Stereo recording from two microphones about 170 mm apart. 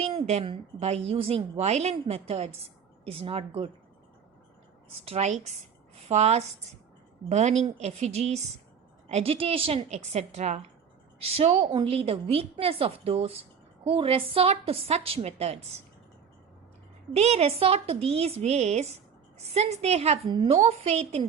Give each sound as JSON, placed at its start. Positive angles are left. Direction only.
{"t": 0.0, "sound": "a sound", "side_deg": -35}
{"t": 0.4, "sound": "a woman's voice", "side_deg": -35}
{"t": 5.0, "sound": "a woman's voice", "side_deg": -40}
{"t": 17.2, "sound": "a woman's voice", "side_deg": -40}